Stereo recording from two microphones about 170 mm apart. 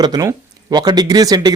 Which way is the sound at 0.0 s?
25° right (ahead or behind).